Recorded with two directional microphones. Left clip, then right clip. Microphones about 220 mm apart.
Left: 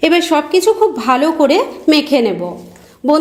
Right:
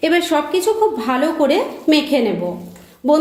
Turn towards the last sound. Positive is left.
turn(degrees=30)  # may be behind; listen again after turning